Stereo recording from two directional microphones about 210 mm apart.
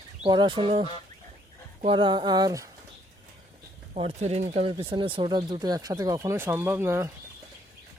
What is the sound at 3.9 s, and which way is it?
Speech, 30° right (ahead or behind).